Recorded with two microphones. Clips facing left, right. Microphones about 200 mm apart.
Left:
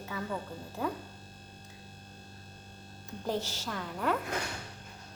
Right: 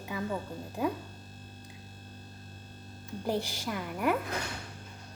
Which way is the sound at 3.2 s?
10° right (ahead or behind).